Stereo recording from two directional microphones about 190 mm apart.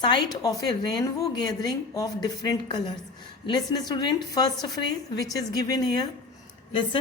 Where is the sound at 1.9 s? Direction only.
20° left (ahead or behind).